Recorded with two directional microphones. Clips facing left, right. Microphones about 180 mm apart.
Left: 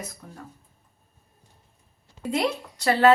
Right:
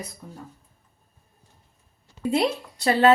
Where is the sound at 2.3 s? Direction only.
25° right (ahead or behind).